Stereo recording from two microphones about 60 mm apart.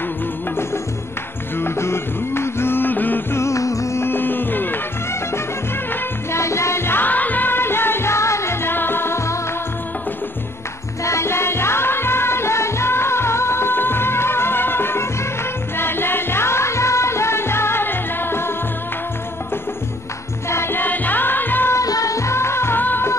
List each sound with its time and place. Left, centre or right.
1.6 s music: left
3.3 s music: left
4.0 s music: left
6.3 s music: left
11.1 s music: left
20.4 s music: left
21.7 s music: left
22.8 s music: left